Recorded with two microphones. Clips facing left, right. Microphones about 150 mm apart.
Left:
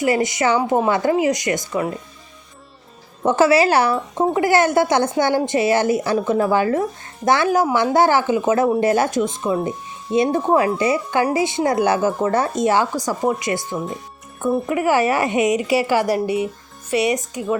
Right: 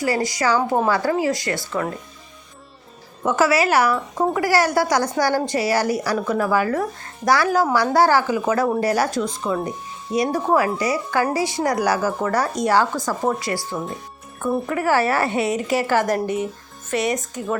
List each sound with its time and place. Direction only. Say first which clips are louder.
0.0 s a woman's voice: left 3 dB; 20° left (ahead or behind)
3.2 s a woman's voice: left 3 dB; 30° left (ahead or behind)
9.6 s music: left 3 dB; 25° left (ahead or behind)
10.8 s a woman's voice: left 3 dB; 25° left (ahead or behind)